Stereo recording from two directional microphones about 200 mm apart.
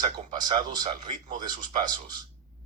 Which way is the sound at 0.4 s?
20° right (ahead or behind).